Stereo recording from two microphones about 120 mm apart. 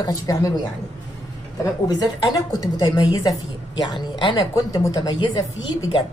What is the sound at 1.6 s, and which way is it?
A woman's voice, 35° left (ahead or behind).